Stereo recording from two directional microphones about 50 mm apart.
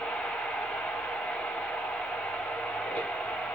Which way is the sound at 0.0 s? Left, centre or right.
Left.